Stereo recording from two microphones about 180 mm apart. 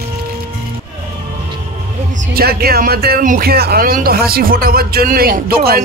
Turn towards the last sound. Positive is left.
turn(degrees=-60)  # may be behind; listen again after turning